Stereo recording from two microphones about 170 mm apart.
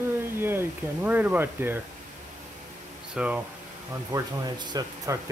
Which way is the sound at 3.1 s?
5° right (ahead or behind).